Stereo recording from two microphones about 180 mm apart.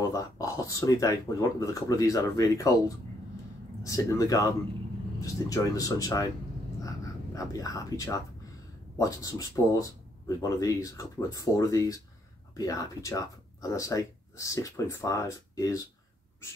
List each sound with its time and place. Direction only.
0.0 s speech: 20° left (ahead or behind)
3.8 s speech: 20° left (ahead or behind)
7.3 s speech: 20° left (ahead or behind)